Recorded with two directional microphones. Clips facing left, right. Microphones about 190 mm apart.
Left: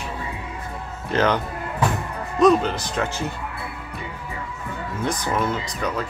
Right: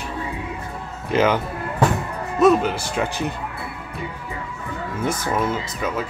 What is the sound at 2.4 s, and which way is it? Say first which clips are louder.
Speech: right 1 dB; 5° right (ahead or behind).